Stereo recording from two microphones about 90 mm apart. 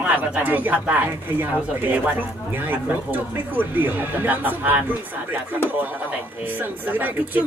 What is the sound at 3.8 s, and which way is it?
Speech, 20° right (ahead or behind).